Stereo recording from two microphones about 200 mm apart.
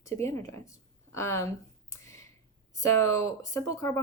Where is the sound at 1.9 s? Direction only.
15° left (ahead or behind).